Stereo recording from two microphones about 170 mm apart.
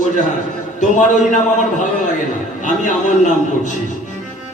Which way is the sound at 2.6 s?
45° left (ahead or behind).